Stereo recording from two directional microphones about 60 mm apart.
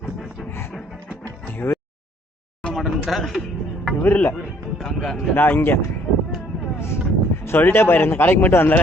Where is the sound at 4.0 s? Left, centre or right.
Left.